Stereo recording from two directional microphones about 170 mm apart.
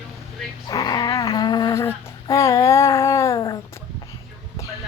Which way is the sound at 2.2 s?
20° left (ahead or behind).